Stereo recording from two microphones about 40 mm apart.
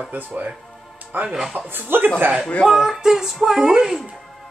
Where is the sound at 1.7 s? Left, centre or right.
Right.